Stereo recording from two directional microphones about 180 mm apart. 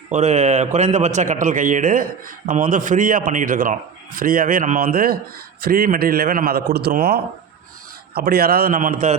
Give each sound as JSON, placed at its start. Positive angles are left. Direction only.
{"t": 0.1, "sound": "a man's voice", "side_deg": -40}